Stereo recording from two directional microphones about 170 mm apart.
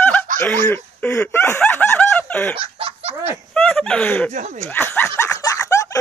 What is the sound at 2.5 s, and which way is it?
Laughter, 35° right (ahead or behind).